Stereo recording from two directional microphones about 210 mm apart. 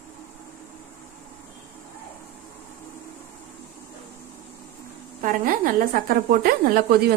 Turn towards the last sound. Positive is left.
turn(degrees=-45)  # may be behind; listen again after turning